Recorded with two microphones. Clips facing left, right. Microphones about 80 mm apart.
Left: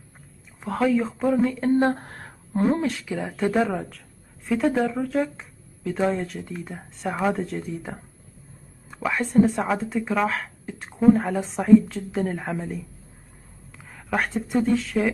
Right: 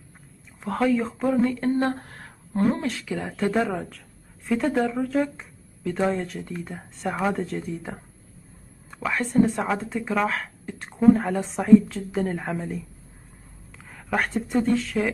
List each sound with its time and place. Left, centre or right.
0.6 s speech: centre
2.0 s a sound: left
2.5 s speech: centre
3.1 s speech: centre
13.9 s speech: centre